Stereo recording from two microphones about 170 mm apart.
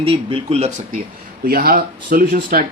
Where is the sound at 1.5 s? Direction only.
60° right (ahead or behind).